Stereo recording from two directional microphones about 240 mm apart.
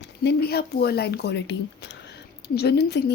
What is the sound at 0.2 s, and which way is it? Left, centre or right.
Speech, left.